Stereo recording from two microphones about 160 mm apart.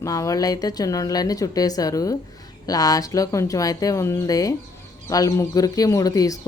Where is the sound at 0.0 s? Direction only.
20° left (ahead or behind).